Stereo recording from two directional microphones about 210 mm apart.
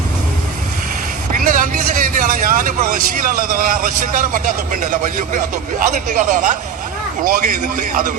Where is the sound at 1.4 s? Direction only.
40° right (ahead or behind).